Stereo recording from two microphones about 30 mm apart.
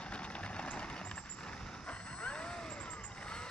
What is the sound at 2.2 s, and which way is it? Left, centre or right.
Vehicle, left.